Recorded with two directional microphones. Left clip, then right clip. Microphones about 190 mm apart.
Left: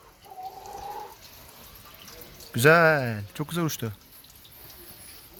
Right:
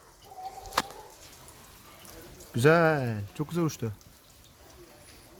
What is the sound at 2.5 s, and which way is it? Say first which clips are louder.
Speech: left 4 dB; 5° right (ahead or behind).